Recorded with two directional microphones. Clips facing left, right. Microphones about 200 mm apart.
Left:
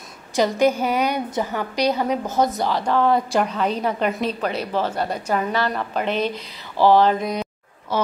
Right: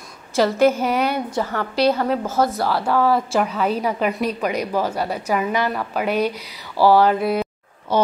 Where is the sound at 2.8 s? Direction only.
5° right (ahead or behind).